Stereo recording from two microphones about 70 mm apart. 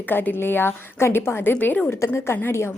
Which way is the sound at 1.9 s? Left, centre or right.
Left.